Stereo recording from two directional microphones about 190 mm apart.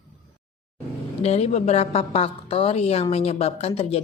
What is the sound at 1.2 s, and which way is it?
A woman's voice, 35° left (ahead or behind).